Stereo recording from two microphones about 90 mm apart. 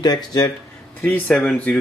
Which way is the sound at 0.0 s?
45° left (ahead or behind).